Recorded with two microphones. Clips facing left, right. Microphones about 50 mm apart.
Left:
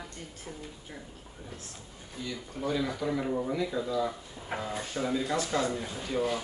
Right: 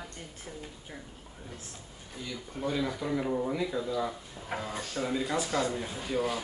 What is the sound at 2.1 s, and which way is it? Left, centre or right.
Speech, centre.